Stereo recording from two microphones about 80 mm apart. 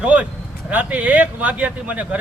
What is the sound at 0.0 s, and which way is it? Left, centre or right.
Speech, centre.